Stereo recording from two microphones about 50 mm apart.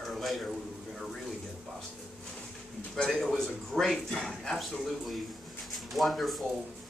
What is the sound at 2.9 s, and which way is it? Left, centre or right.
Speech, centre.